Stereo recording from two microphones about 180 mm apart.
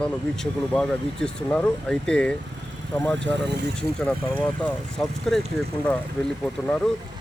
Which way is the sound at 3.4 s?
65° right (ahead or behind).